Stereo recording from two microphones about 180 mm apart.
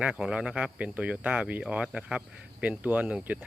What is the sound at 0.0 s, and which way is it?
Speech, 5° right (ahead or behind).